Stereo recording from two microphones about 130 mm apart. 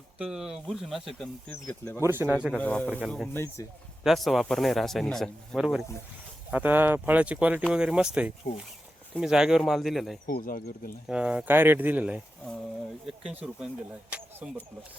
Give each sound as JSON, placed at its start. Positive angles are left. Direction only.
{"t": 0.2, "sound": "a man's voice", "side_deg": -5}
{"t": 2.0, "sound": "speech", "side_deg": -15}
{"t": 2.5, "sound": "speech", "side_deg": 10}
{"t": 3.0, "sound": "a man's voice", "side_deg": 0}
{"t": 3.3, "sound": "speech", "side_deg": 20}
{"t": 4.0, "sound": "a man's voice", "side_deg": 0}
{"t": 6.5, "sound": "a man's voice", "side_deg": -15}
{"t": 10.2, "sound": "speech", "side_deg": 90}
{"t": 11.1, "sound": "a man's voice", "side_deg": -10}